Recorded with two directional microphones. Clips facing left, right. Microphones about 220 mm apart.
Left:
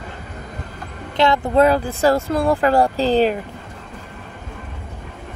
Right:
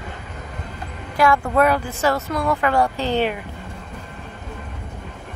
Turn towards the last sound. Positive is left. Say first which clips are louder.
# left 5 dB
turn(degrees=35)  # may be behind; listen again after turning